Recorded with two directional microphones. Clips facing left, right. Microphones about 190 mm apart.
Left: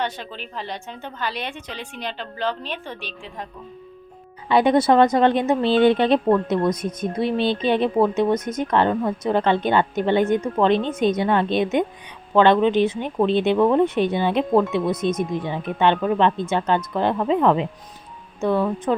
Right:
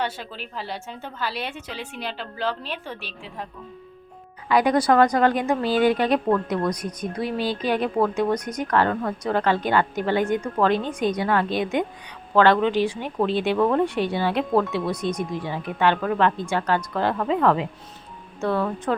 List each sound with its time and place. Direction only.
0.0 s a woman's voice: 5° right (ahead or behind)
4.4 s speech: 25° left (ahead or behind)